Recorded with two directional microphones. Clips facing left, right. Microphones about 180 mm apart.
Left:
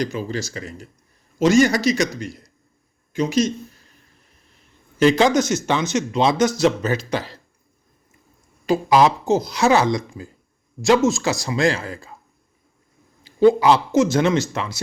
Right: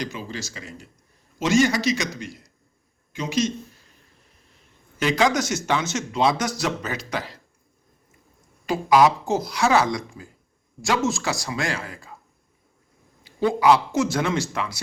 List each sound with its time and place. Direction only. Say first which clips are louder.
0.0 s a man's voice: left 7 dB; 40° left (ahead or behind)
3.2 s a man's voice: left 5 dB; 35° left (ahead or behind)
5.0 s speech: left 6 dB; 25° left (ahead or behind)
8.6 s speech: left 2 dB; 25° left (ahead or behind)
13.4 s speech: left 4 dB; 25° left (ahead or behind)